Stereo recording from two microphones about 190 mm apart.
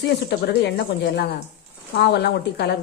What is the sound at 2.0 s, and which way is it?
Speech, 60° left (ahead or behind).